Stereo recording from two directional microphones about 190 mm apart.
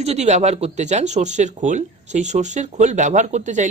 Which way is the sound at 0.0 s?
35° right (ahead or behind).